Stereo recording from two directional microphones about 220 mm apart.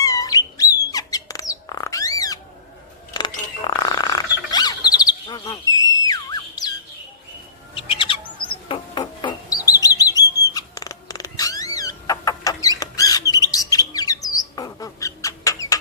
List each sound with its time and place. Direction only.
0.0 s bird: 15° left (ahead or behind)
3.1 s a sound: 20° left (ahead or behind)
4.9 s bird: 20° left (ahead or behind)
7.8 s bird: 25° left (ahead or behind)
10.0 s cat: 15° left (ahead or behind)
14.3 s bird: 15° left (ahead or behind)